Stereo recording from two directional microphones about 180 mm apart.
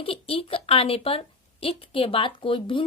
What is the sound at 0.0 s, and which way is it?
A woman's voice, 30° left (ahead or behind).